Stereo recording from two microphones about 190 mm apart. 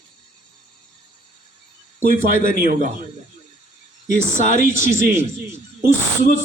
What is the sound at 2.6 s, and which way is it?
Speech, 45° right (ahead or behind).